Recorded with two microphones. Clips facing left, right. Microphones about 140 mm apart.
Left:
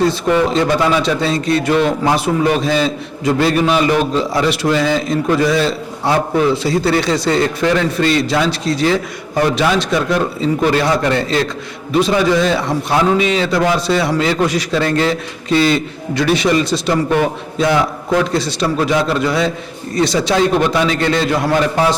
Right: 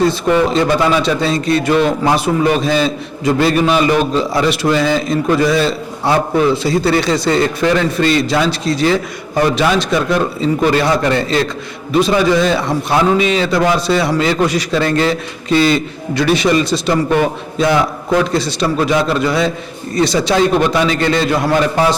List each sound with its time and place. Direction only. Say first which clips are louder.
0.3 s a man's voice: right 1 dB; 20° right (ahead or behind)
13.5 s a man's voice: right 1 dB; 25° right (ahead or behind)
16.9 s a man's voice: right 1 dB; 25° right (ahead or behind)